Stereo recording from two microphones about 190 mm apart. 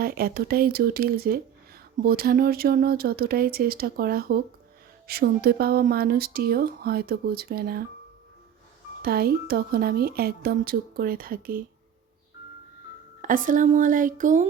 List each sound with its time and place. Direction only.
0.0 s speech: 50° right (ahead or behind)
9.0 s speech: 55° right (ahead or behind)
13.2 s speech: 45° right (ahead or behind)